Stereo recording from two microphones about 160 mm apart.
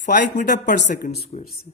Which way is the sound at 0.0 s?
55° left (ahead or behind).